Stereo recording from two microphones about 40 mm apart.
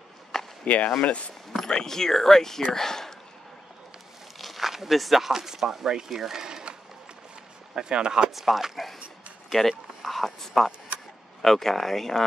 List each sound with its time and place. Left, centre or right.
0.3 s chop: centre
0.7 s speech: left
1.7 s speech: centre
4.4 s speech: centre; by 8.3 s right
8.3 s speech: centre